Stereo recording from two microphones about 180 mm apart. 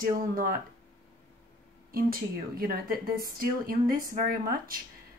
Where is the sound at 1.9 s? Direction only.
55° right (ahead or behind).